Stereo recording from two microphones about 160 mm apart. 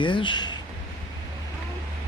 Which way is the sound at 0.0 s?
30° left (ahead or behind).